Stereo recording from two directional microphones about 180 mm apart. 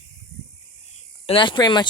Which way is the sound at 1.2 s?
30° left (ahead or behind).